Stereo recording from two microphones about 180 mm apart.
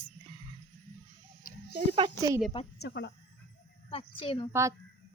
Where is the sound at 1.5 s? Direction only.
50° left (ahead or behind).